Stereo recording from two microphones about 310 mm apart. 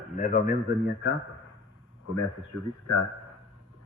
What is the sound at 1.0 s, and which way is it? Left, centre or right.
Speech, left.